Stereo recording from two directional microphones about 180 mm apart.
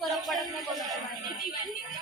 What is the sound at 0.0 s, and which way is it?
Music, centre (ahead or behind).